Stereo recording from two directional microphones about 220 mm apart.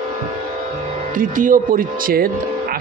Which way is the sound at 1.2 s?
40° right (ahead or behind).